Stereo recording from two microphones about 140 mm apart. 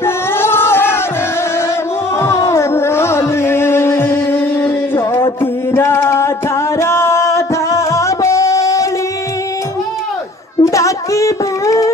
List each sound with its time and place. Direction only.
0.0 s music: 15° left (ahead or behind)
2.2 s music: 20° left (ahead or behind)
10.6 s a sound: 20° left (ahead or behind)